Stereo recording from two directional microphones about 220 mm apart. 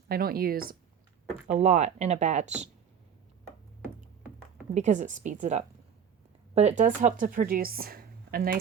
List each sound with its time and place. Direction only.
0.1 s speech: 45° right (ahead or behind)
1.5 s speech: 30° right (ahead or behind)
3.8 s music: 5° right (ahead or behind)
4.7 s speech: 35° right (ahead or behind)